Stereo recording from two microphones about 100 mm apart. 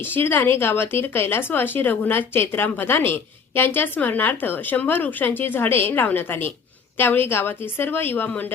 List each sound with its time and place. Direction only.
0.0 s speech: 20° left (ahead or behind)